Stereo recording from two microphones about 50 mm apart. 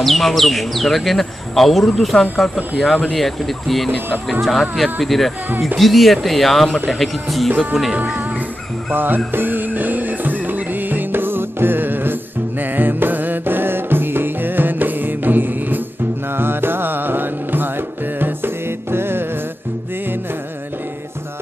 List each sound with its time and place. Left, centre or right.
0.0 s speech: centre
7.4 s speech: centre
7.9 s music: right
8.9 s music: right